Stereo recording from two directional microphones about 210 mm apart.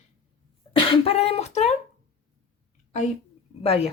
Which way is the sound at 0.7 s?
25° left (ahead or behind).